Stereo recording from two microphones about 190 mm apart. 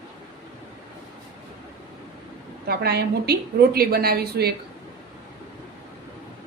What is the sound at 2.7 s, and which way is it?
A woman's voice, 55° right (ahead or behind).